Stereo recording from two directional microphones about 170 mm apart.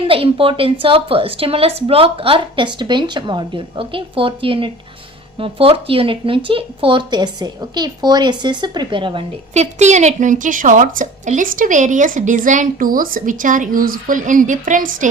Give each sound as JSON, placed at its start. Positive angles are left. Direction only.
{"t": 0.1, "sound": "a woman's voice", "side_deg": -35}
{"t": 9.7, "sound": "a woman's voice", "side_deg": -40}